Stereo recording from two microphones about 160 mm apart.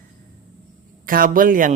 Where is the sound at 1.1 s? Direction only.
60° right (ahead or behind).